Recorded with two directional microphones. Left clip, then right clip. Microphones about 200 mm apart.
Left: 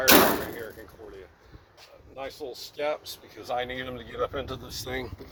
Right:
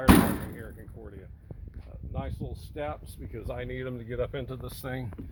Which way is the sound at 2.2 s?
30° right (ahead or behind).